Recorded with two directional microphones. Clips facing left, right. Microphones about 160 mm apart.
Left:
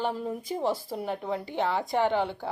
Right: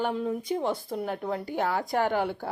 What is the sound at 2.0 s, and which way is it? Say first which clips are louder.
Speech: left 1 dB; 20° left (ahead or behind).